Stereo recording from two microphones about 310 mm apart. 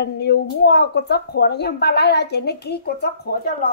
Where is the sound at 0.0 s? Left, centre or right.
Left.